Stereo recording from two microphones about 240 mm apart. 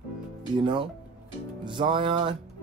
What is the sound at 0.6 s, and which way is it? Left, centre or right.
Music, right.